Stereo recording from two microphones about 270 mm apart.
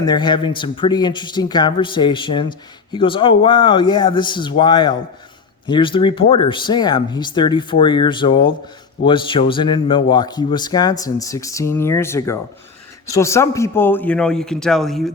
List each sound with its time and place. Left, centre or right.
0.0 s a man's voice: centre